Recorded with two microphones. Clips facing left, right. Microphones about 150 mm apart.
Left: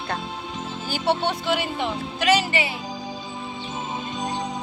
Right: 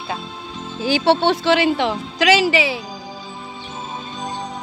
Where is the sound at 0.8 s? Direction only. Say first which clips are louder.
Right 8 dB; 90° right.